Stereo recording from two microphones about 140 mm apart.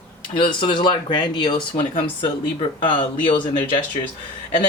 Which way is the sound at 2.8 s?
35° left (ahead or behind).